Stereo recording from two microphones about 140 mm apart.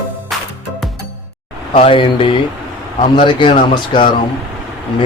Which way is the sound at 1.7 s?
40° left (ahead or behind).